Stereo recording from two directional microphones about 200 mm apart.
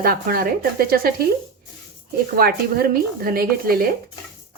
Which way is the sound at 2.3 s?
50° right (ahead or behind).